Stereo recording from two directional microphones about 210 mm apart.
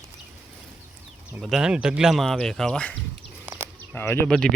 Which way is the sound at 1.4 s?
Centre (ahead or behind).